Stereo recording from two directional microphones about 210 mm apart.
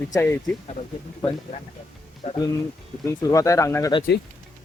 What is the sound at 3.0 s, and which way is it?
Speech, 15° left (ahead or behind).